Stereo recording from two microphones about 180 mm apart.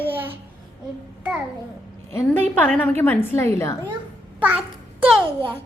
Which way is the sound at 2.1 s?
10° left (ahead or behind).